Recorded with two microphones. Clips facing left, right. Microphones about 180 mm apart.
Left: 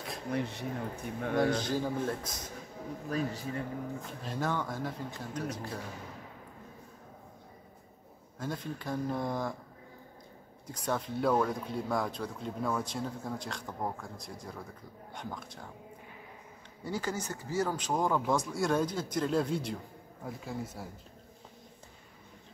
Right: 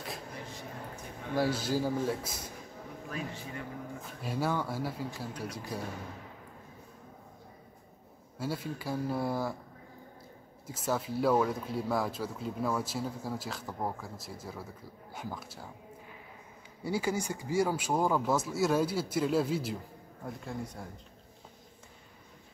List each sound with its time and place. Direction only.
0.3 s speech: 70° left (ahead or behind)
1.3 s speech: 5° right (ahead or behind)
3.1 s a man's voice: 35° left (ahead or behind)
4.0 s speech: 10° right (ahead or behind)
8.4 s speech: 5° right (ahead or behind)
10.7 s speech: 5° right (ahead or behind)
16.8 s speech: 10° right (ahead or behind)